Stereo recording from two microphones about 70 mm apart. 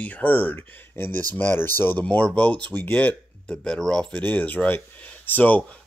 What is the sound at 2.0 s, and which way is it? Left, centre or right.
Speech, centre.